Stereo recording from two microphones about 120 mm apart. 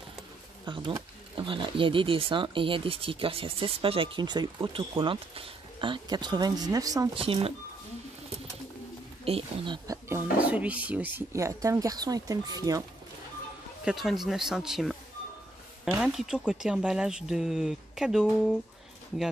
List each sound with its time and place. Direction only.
0.7 s speech: 40° right (ahead or behind)
7.2 s speech: 50° right (ahead or behind)
9.2 s speech: 55° right (ahead or behind)
9.8 s speech: 20° right (ahead or behind)
10.5 s speech: 10° right (ahead or behind); by 12.8 s 30° right (ahead or behind)
13.8 s speech: centre (ahead or behind)
16.0 s speech: 5° right (ahead or behind)